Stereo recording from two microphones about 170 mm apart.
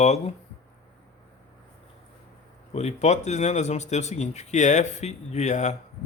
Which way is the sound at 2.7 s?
40° left (ahead or behind).